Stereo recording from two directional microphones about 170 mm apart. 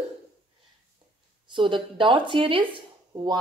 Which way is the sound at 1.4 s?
30° right (ahead or behind).